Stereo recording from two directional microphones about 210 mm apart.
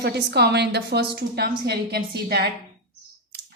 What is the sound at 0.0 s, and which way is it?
A woman's voice, 55° right (ahead or behind).